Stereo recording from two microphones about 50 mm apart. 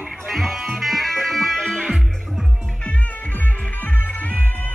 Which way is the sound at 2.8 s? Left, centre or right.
Left.